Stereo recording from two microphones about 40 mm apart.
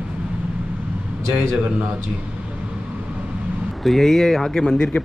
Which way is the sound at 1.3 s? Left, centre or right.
Right.